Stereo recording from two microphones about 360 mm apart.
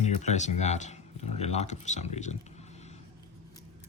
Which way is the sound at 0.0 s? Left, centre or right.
Centre.